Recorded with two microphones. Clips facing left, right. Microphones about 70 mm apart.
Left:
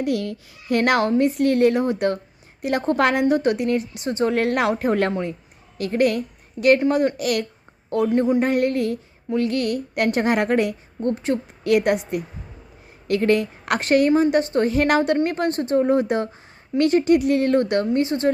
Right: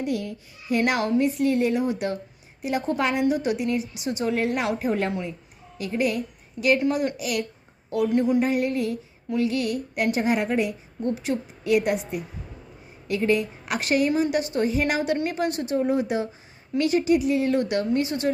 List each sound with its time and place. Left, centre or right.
0.0 s a woman's voice: left
4.4 s a woman's voice: left
6.7 s a woman's voice: left
7.2 s a woman's voice: left
8.0 s a woman's voice: left
8.4 s a woman's voice: left
11.1 s a woman's voice: left
11.6 s a woman's voice: left
13.1 s a woman's voice: left
14.7 s a woman's voice: left
15.2 s a woman's voice: left